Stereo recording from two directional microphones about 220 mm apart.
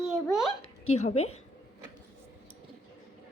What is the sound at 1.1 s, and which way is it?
Speech, 80° left.